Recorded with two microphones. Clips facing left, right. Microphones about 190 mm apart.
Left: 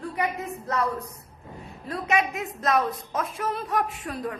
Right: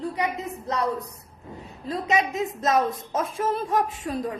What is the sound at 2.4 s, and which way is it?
A woman's voice, 25° right (ahead or behind).